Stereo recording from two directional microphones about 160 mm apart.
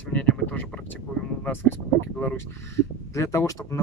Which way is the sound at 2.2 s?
10° left (ahead or behind).